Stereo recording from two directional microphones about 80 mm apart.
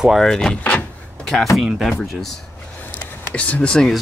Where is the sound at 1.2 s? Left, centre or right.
Centre.